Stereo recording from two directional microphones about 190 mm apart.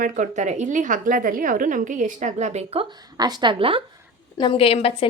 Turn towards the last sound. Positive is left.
turn(degrees=30)  # may be behind; listen again after turning